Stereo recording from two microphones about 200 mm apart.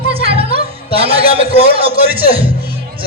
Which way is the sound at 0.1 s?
30° right (ahead or behind).